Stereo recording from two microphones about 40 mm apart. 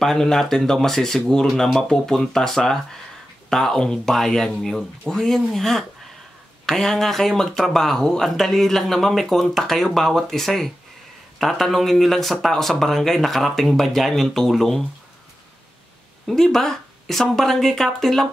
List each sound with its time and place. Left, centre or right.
0.0 s speech: centre
16.3 s speech: centre